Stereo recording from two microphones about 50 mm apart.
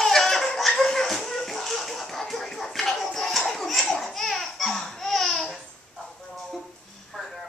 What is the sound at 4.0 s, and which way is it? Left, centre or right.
Laughter, centre.